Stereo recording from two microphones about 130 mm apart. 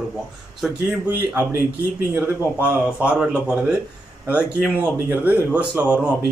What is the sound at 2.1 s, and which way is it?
Speech, 15° right (ahead or behind).